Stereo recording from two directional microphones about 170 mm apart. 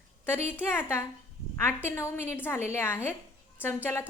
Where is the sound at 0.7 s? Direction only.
15° left (ahead or behind).